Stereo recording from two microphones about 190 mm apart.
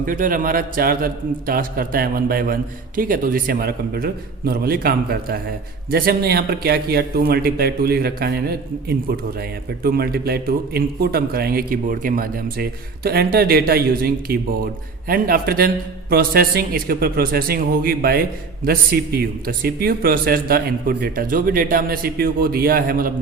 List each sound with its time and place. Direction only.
0.0 s a man's voice: 45° right (ahead or behind)